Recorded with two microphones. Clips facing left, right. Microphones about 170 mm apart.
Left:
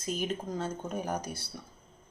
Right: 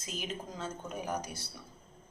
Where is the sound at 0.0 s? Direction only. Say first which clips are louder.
Left 7 dB; 35° left (ahead or behind).